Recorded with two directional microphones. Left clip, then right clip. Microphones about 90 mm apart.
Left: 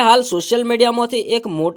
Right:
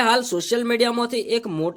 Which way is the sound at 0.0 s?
40° left (ahead or behind).